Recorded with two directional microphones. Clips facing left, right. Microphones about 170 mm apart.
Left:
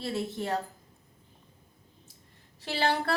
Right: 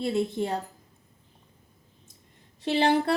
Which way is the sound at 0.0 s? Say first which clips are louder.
Right 6 dB; 15° right (ahead or behind).